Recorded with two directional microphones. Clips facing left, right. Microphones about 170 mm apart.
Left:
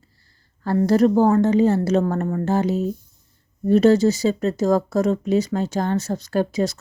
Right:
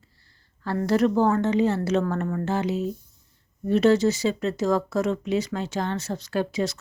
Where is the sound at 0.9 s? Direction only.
40° left (ahead or behind).